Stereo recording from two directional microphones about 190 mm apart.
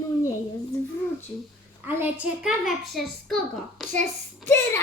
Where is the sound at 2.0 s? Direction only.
5° right (ahead or behind).